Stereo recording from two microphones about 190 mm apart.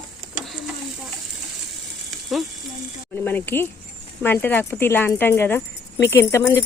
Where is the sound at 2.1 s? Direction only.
Centre (ahead or behind).